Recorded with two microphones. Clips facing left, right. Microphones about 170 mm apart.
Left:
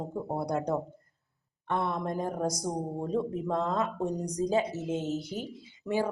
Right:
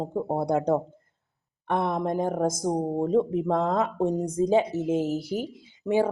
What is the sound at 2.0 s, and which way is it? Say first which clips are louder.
Speech: right 6 dB; 20° right (ahead or behind).